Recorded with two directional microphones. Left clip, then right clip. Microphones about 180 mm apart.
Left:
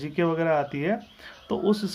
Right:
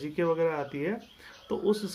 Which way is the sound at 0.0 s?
40° left (ahead or behind).